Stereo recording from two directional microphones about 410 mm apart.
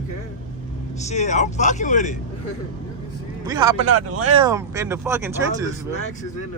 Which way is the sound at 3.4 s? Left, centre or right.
Centre.